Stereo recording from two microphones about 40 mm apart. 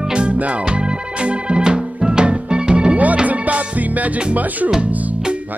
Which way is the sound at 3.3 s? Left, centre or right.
Right.